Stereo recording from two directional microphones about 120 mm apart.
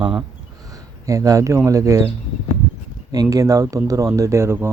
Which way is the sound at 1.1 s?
30° right (ahead or behind).